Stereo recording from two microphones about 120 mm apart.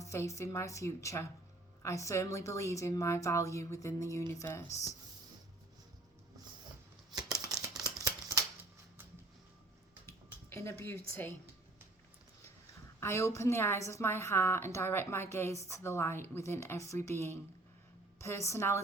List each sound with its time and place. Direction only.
0.0 s a woman's voice: 25° left (ahead or behind)
7.2 s scissors: 30° right (ahead or behind)
7.8 s a sound: 30° right (ahead or behind)
10.5 s a woman's voice: 25° left (ahead or behind)
13.0 s a woman's voice: 20° left (ahead or behind)